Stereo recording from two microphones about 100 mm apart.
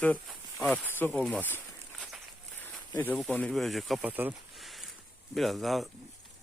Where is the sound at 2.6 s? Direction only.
20° left (ahead or behind).